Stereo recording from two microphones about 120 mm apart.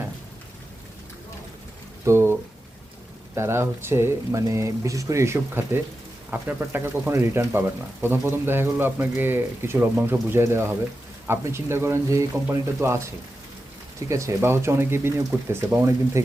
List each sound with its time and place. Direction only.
2.0 s speech: 20° right (ahead or behind)
3.3 s speech: 20° right (ahead or behind)
14.1 s speech: 25° right (ahead or behind)